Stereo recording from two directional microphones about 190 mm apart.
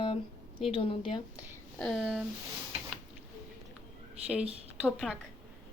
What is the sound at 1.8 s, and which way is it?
Speech, centre (ahead or behind).